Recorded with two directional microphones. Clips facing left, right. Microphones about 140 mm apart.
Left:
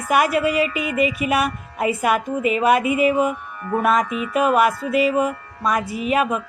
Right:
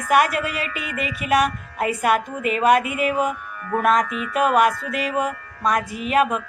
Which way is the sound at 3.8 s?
5° left (ahead or behind).